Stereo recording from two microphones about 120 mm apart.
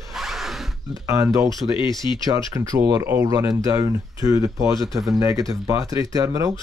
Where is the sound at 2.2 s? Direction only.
30° right (ahead or behind).